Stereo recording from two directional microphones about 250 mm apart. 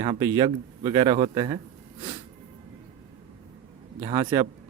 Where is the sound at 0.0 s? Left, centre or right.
Centre.